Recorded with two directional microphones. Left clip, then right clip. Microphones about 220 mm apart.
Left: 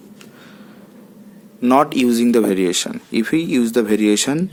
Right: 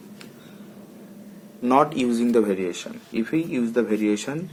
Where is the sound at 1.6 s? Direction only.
35° left (ahead or behind).